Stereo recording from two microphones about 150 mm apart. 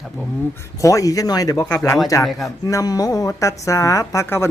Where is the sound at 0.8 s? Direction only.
20° left (ahead or behind).